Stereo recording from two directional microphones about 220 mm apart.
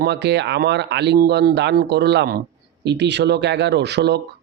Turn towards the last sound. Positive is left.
turn(degrees=-50)  # may be behind; listen again after turning